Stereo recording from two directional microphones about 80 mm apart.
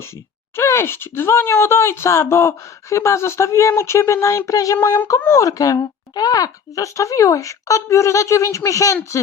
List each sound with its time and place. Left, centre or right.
0.5 s speech: left